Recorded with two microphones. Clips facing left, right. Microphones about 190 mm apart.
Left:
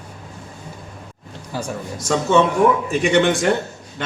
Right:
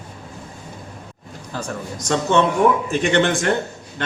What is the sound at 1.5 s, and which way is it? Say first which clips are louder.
A man's voice: left 1 dB; 10° left (ahead or behind).